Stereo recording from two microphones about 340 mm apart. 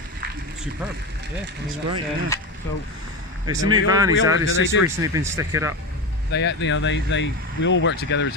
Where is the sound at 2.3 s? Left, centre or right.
Centre.